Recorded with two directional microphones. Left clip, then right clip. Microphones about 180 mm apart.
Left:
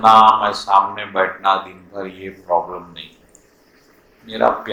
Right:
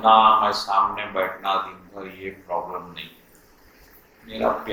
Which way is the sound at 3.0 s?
20° left (ahead or behind).